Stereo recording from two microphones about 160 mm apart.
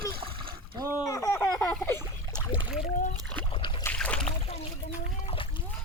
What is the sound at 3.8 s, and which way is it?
Splash, 5° left (ahead or behind).